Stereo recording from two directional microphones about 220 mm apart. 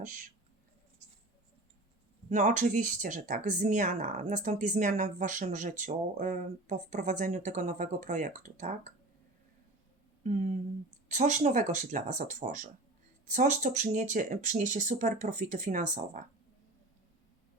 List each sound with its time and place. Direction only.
0.0 s speech: 35° right (ahead or behind)
2.3 s speech: 35° right (ahead or behind)
11.1 s speech: 30° right (ahead or behind)